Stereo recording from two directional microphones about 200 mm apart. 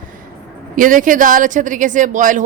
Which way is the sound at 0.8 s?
40° right (ahead or behind).